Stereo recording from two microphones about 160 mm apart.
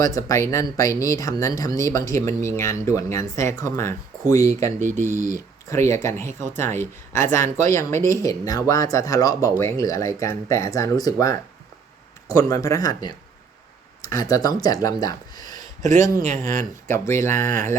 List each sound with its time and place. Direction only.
0.0 s speech: 20° left (ahead or behind)
15.8 s speech: 50° right (ahead or behind)
16.8 s speech: 15° left (ahead or behind)